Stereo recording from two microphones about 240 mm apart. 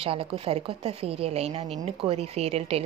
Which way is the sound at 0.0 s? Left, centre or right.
Right.